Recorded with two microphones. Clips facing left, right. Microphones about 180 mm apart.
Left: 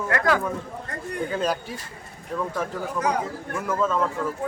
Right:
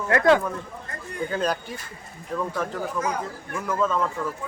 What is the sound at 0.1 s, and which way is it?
Speech, 25° right (ahead or behind).